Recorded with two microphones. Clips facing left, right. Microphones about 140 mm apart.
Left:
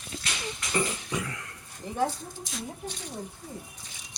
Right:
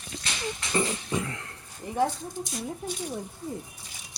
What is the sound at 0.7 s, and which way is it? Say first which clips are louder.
Music: right 2 dB; 25° right (ahead or behind).